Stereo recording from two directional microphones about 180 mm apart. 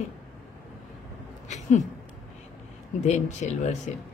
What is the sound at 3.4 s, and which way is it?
Speech, 40° left (ahead or behind).